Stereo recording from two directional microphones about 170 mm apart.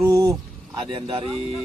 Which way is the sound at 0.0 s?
20° right (ahead or behind).